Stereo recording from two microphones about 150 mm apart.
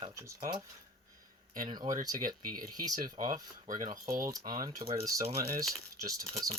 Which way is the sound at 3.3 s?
60° right (ahead or behind).